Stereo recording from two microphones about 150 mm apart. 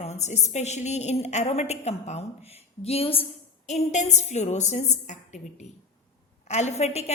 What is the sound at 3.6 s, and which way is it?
A woman's voice, 50° left (ahead or behind).